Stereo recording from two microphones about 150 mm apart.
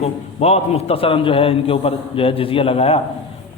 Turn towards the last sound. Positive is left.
turn(degrees=40)  # may be behind; listen again after turning